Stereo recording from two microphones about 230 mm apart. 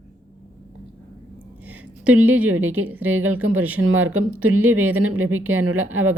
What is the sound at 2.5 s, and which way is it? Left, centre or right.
Speech, right.